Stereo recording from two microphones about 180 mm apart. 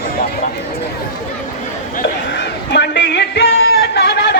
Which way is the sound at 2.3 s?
70° left (ahead or behind).